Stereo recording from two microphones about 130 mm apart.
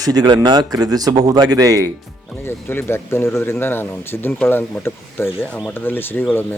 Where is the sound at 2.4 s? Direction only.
15° left (ahead or behind).